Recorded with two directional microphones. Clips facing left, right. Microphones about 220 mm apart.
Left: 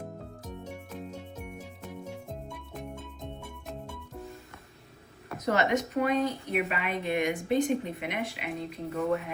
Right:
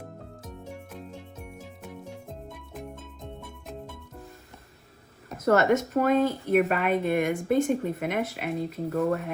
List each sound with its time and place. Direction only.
1.8 s music: centre (ahead or behind)
5.4 s a woman's voice: 50° right (ahead or behind)